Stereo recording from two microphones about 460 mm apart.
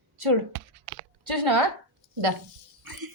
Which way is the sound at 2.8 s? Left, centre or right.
Right.